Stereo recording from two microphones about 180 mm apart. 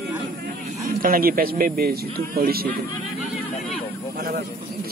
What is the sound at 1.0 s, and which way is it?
Speech, 55° right (ahead or behind).